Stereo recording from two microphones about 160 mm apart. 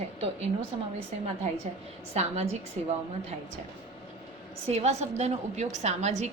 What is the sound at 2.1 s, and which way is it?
Speech, 45° right (ahead or behind).